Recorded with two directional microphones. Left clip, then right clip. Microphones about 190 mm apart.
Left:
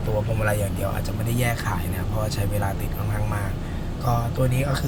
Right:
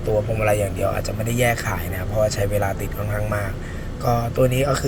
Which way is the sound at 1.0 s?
15° right (ahead or behind).